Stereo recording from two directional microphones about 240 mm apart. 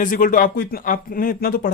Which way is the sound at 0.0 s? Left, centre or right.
Left.